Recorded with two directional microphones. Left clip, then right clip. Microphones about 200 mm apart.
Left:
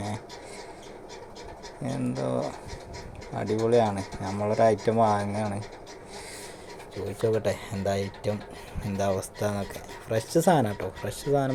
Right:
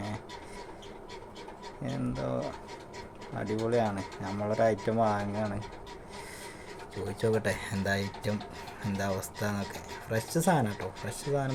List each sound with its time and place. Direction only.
1.8 s speech: 10° left (ahead or behind)
7.2 s speech: 5° left (ahead or behind); by 11.5 s 20° left (ahead or behind)